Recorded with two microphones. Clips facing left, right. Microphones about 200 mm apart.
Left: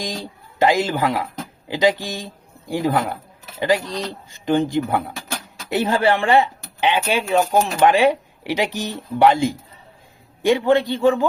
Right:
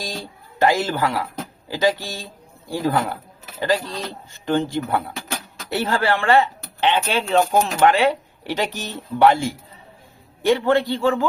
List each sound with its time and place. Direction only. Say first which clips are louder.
0.0 s speech: left 3 dB; 15° left (ahead or behind)